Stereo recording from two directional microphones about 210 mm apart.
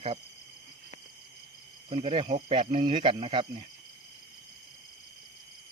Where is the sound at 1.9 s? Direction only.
25° right (ahead or behind).